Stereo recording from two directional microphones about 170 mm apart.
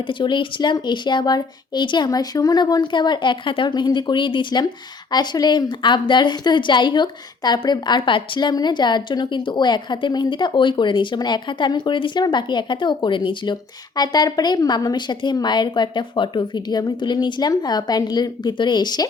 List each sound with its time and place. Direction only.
0.1 s a woman's voice: 30° left (ahead or behind)